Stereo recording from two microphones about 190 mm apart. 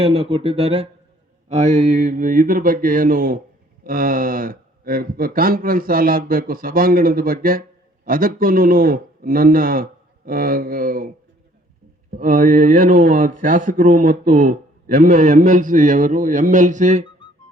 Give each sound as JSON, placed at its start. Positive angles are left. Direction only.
{"t": 0.0, "sound": "speech", "side_deg": -30}
{"t": 12.1, "sound": "speech", "side_deg": -45}